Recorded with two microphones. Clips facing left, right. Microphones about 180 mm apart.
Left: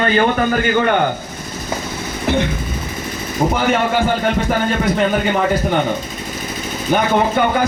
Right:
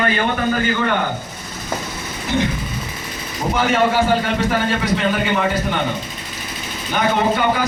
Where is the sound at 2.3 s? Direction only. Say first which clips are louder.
Left 3 dB; 60° left (ahead or behind).